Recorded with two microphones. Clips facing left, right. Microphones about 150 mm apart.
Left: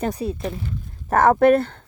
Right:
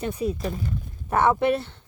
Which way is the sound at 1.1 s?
45° left (ahead or behind).